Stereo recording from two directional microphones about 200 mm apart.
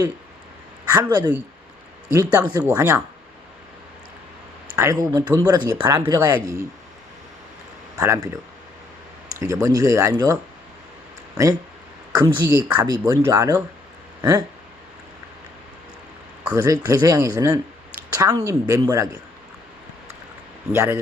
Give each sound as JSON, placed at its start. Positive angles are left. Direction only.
{"t": 0.9, "sound": "speech", "side_deg": -20}
{"t": 4.8, "sound": "speech", "side_deg": -15}
{"t": 7.9, "sound": "speech", "side_deg": -15}
{"t": 9.4, "sound": "speech", "side_deg": -15}
{"t": 12.1, "sound": "speech", "side_deg": -15}
{"t": 16.6, "sound": "speech", "side_deg": -15}
{"t": 20.7, "sound": "speech", "side_deg": -15}